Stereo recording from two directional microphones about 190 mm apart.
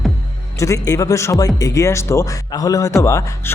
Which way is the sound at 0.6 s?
15° left (ahead or behind).